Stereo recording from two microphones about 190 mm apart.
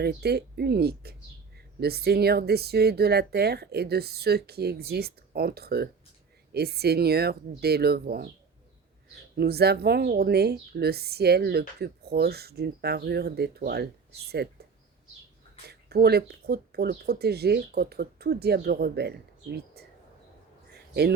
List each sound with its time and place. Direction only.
0.0 s speech: 60° right (ahead or behind)
9.3 s speech: 55° right (ahead or behind)
15.6 s speech: 55° right (ahead or behind)
20.7 s a sound: 60° right (ahead or behind)